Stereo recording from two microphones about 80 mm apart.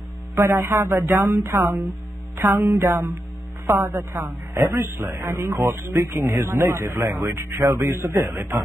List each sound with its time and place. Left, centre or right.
0.4 s speech: right
1.5 s speech: right
5.7 s speech: right